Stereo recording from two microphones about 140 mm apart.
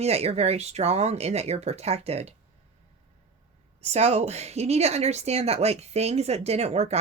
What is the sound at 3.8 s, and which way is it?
A woman's voice, 50° right (ahead or behind).